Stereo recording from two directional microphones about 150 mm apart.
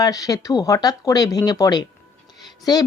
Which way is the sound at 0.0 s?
25° left (ahead or behind).